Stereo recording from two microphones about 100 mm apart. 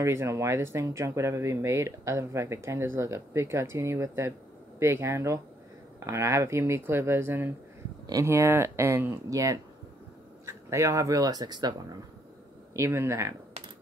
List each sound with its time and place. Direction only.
0.0 s speech: 25° right (ahead or behind); by 11.7 s 45° right (ahead or behind)
12.7 s speech: 25° right (ahead or behind)